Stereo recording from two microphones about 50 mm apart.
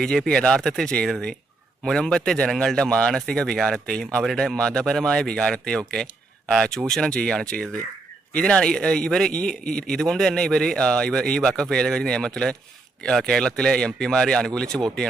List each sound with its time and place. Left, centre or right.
0.0 s a man's voice: centre